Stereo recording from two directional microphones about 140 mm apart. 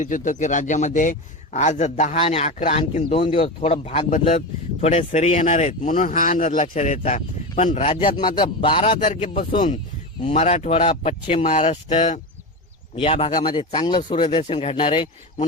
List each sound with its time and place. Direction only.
0.0 s speech: 65° left (ahead or behind)
2.2 s speech: 50° left (ahead or behind); by 6.3 s 70° left (ahead or behind)
6.3 s speech: 60° left (ahead or behind)
7.9 s speech: 35° left (ahead or behind)
8.9 s speech: 65° left (ahead or behind)
10.2 s speech: 45° left (ahead or behind)
11.5 s speech: 60° left (ahead or behind)
13.0 s speech: 45° left (ahead or behind)